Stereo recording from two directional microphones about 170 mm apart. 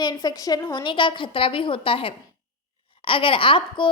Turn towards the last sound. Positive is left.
turn(degrees=30)  # may be behind; listen again after turning